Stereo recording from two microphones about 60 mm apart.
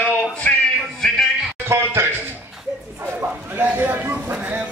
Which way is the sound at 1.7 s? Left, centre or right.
Right.